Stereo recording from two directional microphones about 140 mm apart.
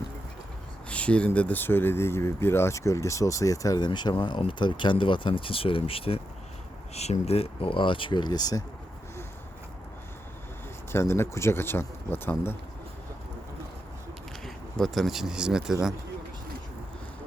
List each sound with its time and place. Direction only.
0.9 s speech: 10° left (ahead or behind); by 8.6 s 30° left (ahead or behind)
10.9 s speech: 20° left (ahead or behind)
14.4 s speech: centre (ahead or behind)